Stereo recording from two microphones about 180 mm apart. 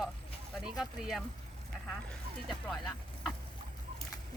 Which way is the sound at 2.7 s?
5° left (ahead or behind).